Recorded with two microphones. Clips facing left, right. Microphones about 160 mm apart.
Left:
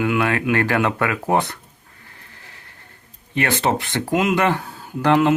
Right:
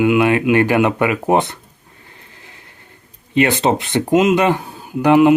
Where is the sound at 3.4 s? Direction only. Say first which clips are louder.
Right 5 dB; 20° right (ahead or behind).